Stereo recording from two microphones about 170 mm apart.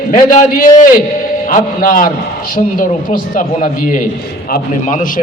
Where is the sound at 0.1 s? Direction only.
55° left (ahead or behind).